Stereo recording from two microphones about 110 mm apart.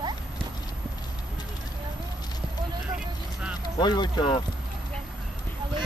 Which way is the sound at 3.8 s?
40° left (ahead or behind).